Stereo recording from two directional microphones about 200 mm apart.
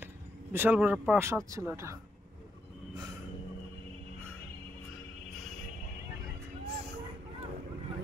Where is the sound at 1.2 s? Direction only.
15° right (ahead or behind).